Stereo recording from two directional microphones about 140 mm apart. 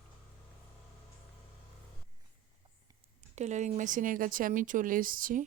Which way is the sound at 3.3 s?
55° right (ahead or behind).